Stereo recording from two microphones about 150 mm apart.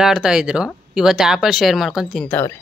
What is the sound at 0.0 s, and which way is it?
Speech, 5° right (ahead or behind).